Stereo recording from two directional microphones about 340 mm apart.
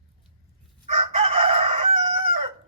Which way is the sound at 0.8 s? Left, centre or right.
Centre.